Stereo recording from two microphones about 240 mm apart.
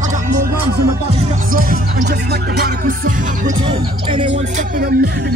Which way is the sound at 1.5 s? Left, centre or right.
Right.